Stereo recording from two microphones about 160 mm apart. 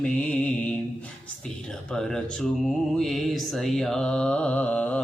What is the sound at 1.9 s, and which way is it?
Mantra, 5° left (ahead or behind).